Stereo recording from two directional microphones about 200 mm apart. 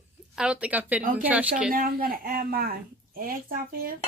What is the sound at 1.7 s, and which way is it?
A woman's voice, 45° right (ahead or behind).